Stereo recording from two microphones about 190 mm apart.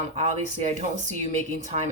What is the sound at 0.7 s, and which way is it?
Speech, 40° right (ahead or behind).